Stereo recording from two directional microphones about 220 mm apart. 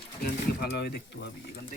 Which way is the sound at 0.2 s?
45° left (ahead or behind).